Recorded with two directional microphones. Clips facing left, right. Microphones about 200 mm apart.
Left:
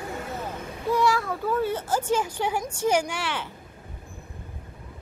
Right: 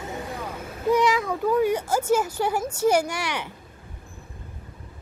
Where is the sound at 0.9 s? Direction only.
20° right (ahead or behind).